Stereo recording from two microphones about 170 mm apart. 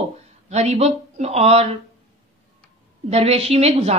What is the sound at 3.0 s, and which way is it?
Speech, 35° right (ahead or behind).